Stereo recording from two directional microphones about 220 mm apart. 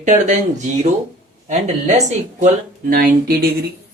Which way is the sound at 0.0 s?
35° right (ahead or behind).